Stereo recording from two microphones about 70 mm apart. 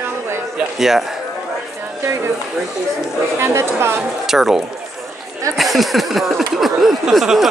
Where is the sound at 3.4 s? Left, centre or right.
Right.